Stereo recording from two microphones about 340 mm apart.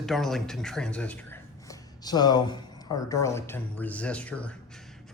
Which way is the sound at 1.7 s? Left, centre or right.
Centre.